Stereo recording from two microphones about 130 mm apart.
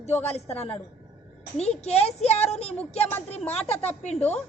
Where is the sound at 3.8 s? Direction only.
55° left (ahead or behind).